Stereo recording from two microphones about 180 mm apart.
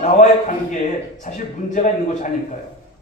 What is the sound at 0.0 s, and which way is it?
A man's voice, 45° left (ahead or behind).